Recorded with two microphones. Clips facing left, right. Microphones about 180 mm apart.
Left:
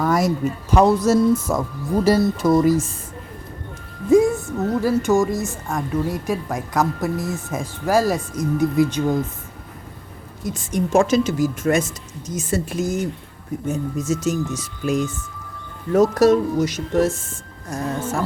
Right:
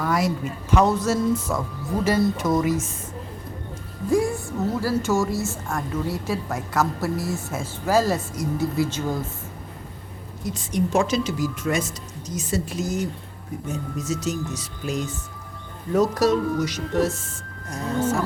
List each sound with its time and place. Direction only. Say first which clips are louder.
0.0 s speech: left 4 dB; 45° left (ahead or behind)
2.0 s speech: left 4 dB; 35° left (ahead or behind)
4.1 s a woman's voice: left 7 dB; 20° left (ahead or behind)
10.5 s speech: left 4 dB; 50° left (ahead or behind)